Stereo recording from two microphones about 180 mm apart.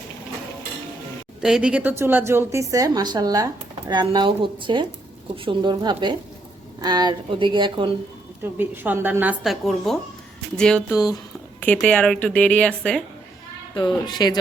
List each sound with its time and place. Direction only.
1.4 s speech: 5° right (ahead or behind); by 7.9 s 25° right (ahead or behind)
8.5 s a woman's voice: 10° right (ahead or behind); by 13.0 s 5° left (ahead or behind)
13.7 s speech: 25° left (ahead or behind)